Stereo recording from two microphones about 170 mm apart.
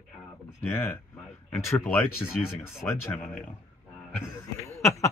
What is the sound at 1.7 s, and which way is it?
Speech, 10° left (ahead or behind).